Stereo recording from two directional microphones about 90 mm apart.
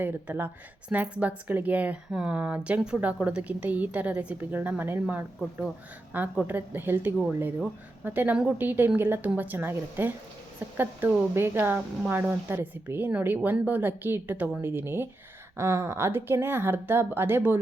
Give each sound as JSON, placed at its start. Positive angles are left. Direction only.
{"t": 0.0, "sound": "a woman's voice", "side_deg": -20}
{"t": 5.4, "sound": "speech", "side_deg": 0}
{"t": 6.1, "sound": "speech", "side_deg": -20}
{"t": 11.3, "sound": "speech", "side_deg": -25}